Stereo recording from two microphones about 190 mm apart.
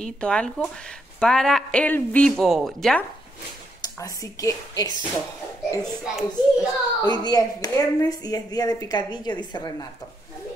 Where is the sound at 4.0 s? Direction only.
15° left (ahead or behind).